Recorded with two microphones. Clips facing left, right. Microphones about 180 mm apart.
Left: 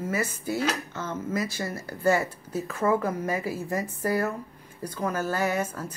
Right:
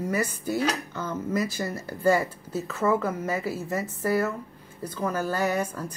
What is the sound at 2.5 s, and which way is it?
Speech, 10° left (ahead or behind).